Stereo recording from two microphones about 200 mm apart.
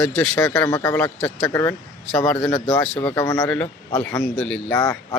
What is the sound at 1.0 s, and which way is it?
Speech, 5° left (ahead or behind).